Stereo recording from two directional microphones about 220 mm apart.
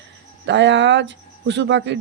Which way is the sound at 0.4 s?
55° right (ahead or behind).